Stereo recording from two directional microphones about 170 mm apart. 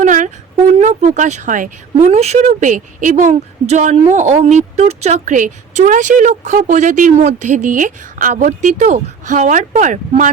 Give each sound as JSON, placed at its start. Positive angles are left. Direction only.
{"t": 0.0, "sound": "a sound", "side_deg": -50}
{"t": 0.8, "sound": "a woman's voice", "side_deg": -45}
{"t": 2.0, "sound": "a woman's voice", "side_deg": -40}